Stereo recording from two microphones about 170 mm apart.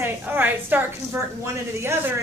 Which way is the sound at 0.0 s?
10° right (ahead or behind).